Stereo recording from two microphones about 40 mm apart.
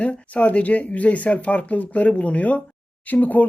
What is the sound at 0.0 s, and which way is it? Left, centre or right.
Speech, left.